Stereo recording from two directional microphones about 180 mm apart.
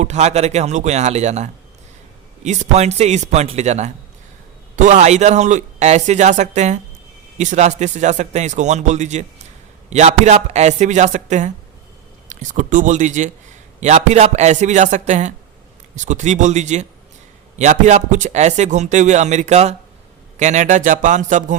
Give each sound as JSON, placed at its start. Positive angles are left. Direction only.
{"t": 0.0, "sound": "speech", "side_deg": -40}